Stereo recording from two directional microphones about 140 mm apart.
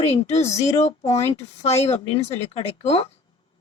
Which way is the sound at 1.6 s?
50° left (ahead or behind).